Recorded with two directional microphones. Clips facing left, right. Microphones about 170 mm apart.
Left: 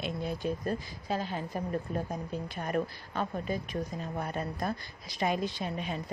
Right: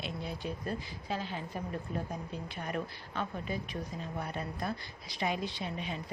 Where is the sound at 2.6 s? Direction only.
45° left (ahead or behind).